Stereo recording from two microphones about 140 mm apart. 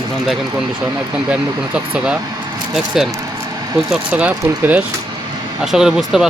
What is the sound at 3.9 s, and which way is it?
Speech, 10° right (ahead or behind).